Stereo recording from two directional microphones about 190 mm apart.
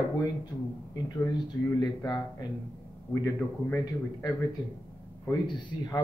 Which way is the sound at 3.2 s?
15° left (ahead or behind).